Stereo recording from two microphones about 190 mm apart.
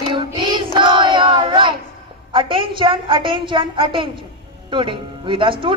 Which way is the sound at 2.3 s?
25° right (ahead or behind).